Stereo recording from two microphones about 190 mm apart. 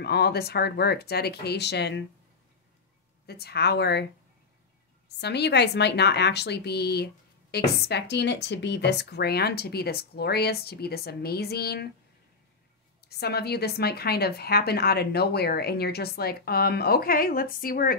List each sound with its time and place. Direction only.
0.0 s a woman's voice: 60° left (ahead or behind)
3.3 s a woman's voice: 55° left (ahead or behind)
5.0 s a woman's voice: 60° left (ahead or behind)
13.0 s a woman's voice: 55° left (ahead or behind)